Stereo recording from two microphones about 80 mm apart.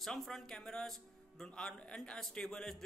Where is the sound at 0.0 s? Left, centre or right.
Centre.